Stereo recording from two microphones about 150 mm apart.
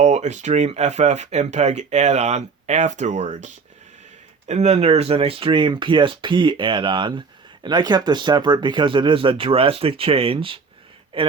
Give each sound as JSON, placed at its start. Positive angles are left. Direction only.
{"t": 0.0, "sound": "speech", "side_deg": -50}